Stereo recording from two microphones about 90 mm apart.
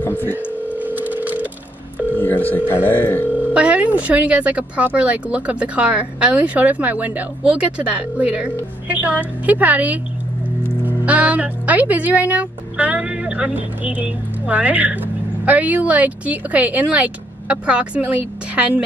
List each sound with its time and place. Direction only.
0.0 s telephone: 25° left (ahead or behind)
0.7 s telephone: 20° right (ahead or behind)
2.1 s speech: 20° left (ahead or behind)
3.5 s speech: 15° right (ahead or behind)